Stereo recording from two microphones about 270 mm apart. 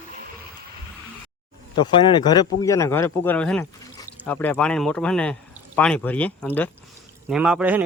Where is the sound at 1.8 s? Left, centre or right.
Centre.